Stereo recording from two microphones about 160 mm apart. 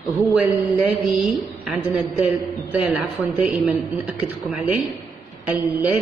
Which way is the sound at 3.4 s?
10° right (ahead or behind).